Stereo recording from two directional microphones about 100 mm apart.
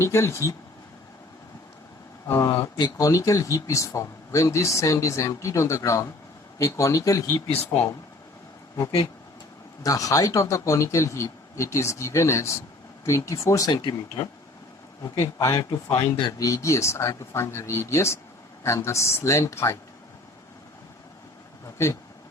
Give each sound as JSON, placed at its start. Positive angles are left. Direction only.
{"t": 0.0, "sound": "speech", "side_deg": 30}
{"t": 2.2, "sound": "speech", "side_deg": 25}
{"t": 7.5, "sound": "speech", "side_deg": 90}
{"t": 9.8, "sound": "speech", "side_deg": 35}
{"t": 15.4, "sound": "speech", "side_deg": 35}